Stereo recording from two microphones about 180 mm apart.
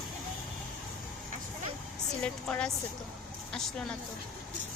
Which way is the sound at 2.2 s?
5° left (ahead or behind).